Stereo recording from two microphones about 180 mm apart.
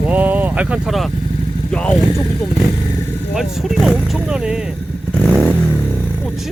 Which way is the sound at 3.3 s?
Centre (ahead or behind).